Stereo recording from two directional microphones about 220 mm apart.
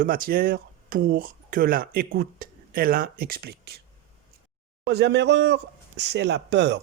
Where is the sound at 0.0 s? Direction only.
40° right (ahead or behind).